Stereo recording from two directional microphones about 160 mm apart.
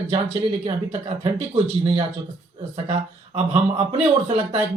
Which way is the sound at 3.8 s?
35° right (ahead or behind).